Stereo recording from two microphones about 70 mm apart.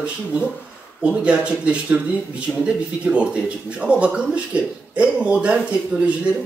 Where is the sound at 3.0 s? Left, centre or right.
Centre.